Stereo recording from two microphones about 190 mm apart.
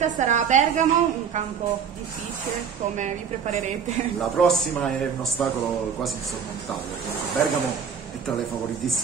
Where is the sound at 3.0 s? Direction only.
35° right (ahead or behind).